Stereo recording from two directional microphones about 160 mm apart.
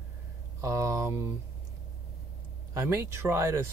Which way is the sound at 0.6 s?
20° right (ahead or behind).